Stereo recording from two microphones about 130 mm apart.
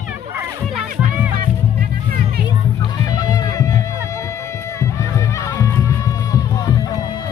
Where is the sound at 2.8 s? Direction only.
30° left (ahead or behind).